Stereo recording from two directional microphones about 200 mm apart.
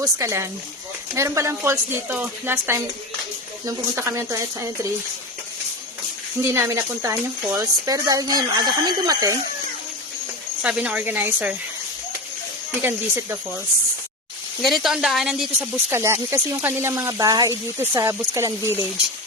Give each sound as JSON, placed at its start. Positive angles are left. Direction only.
{"t": 0.0, "sound": "speech", "side_deg": -15}
{"t": 6.4, "sound": "speech", "side_deg": -15}
{"t": 10.6, "sound": "speech", "side_deg": -5}
{"t": 14.6, "sound": "speech", "side_deg": 0}